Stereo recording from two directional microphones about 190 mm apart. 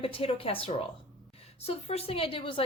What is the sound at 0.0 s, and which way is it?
A woman's voice, 30° left (ahead or behind).